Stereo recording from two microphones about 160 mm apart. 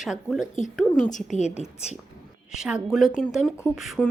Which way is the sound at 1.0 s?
50° left (ahead or behind).